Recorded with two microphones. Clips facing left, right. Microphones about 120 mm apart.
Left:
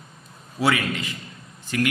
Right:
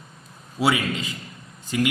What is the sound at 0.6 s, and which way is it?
Speech, 15° right (ahead or behind).